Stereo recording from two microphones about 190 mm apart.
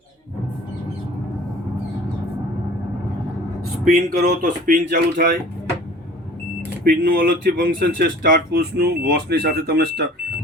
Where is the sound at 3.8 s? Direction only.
50° right (ahead or behind).